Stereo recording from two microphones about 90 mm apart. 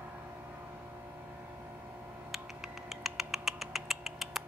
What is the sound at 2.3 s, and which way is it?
Computer keyboard, centre (ahead or behind).